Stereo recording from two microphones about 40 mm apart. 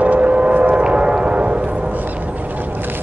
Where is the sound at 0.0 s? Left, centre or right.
Right.